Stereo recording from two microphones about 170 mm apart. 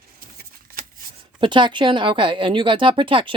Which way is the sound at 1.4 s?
30° right (ahead or behind).